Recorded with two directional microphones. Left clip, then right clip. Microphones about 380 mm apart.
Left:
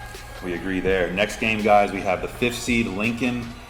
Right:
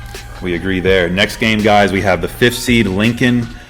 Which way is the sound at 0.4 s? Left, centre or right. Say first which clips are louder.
Right 9 dB; right.